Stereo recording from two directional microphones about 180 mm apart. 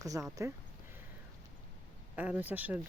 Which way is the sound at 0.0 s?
20° right (ahead or behind).